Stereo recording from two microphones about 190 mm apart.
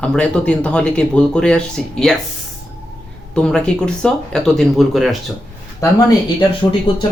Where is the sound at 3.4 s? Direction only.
5° left (ahead or behind).